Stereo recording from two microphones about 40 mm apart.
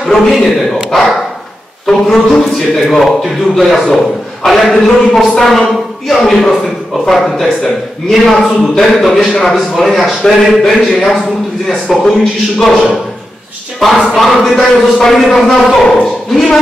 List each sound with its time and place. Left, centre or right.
0.0 s a man's voice: centre
1.9 s a man's voice: centre
3.8 s a man's voice: centre
4.5 s a man's voice: centre
13.7 s a man's voice: centre